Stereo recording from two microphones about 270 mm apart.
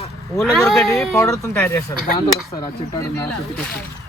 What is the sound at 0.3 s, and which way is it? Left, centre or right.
Speech, centre.